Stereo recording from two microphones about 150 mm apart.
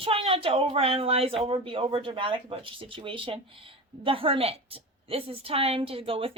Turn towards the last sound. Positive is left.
turn(degrees=-40)  # may be behind; listen again after turning